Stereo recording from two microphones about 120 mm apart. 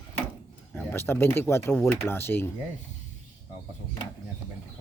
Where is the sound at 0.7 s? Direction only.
20° left (ahead or behind).